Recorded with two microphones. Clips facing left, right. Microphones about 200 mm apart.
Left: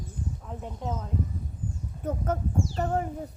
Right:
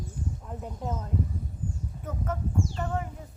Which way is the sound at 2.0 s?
40° left (ahead or behind).